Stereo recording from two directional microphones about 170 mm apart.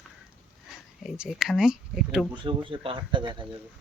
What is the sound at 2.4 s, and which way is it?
Speech, 30° right (ahead or behind).